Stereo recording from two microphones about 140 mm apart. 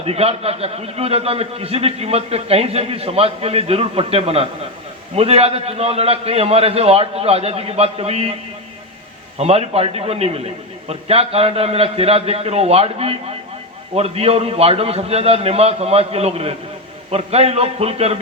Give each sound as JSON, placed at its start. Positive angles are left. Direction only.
{"t": 0.0, "sound": "a man's voice", "side_deg": -45}
{"t": 9.4, "sound": "a man's voice", "side_deg": -45}